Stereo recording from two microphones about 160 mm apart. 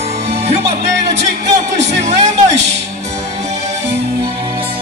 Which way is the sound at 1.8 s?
45° right (ahead or behind).